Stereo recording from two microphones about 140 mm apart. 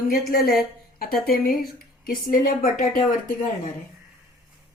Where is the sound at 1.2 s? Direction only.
90° left.